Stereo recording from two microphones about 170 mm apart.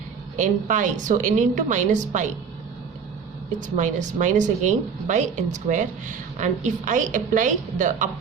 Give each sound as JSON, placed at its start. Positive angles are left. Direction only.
{"t": 0.3, "sound": "speech", "side_deg": -45}
{"t": 3.6, "sound": "speech", "side_deg": -45}